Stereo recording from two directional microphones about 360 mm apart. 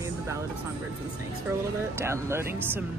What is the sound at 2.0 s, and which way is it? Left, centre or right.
Speech, centre.